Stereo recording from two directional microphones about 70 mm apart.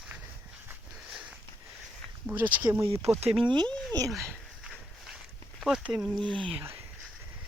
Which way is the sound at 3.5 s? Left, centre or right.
Right.